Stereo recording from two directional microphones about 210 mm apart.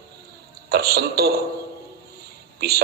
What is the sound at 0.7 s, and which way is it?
Speech, 50° right (ahead or behind).